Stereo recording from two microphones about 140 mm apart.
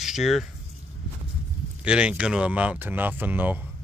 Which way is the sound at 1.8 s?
5° right (ahead or behind).